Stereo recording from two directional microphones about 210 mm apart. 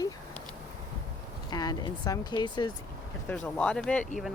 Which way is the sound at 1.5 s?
20° left (ahead or behind).